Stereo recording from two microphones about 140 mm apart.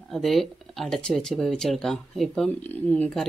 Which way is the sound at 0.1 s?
Centre (ahead or behind).